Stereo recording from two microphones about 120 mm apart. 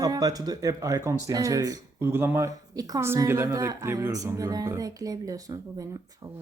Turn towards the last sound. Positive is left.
turn(degrees=-30)  # may be behind; listen again after turning